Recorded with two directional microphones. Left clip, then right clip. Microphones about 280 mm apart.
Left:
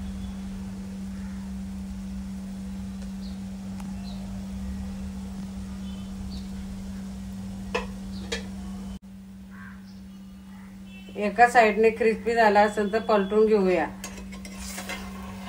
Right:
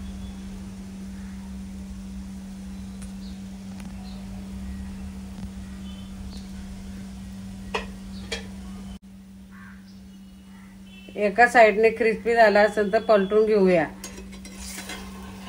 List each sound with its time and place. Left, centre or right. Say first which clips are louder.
11.1 s a woman's voice: right 2 dB; right